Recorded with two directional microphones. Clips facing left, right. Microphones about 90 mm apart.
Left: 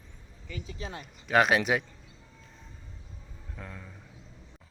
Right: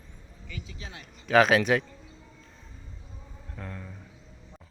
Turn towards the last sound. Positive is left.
turn(degrees=0)  # may be behind; listen again after turning